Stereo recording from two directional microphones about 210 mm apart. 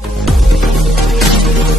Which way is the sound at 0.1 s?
Centre (ahead or behind).